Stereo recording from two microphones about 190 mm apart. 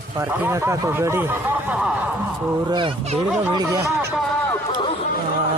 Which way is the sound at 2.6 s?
25° right (ahead or behind).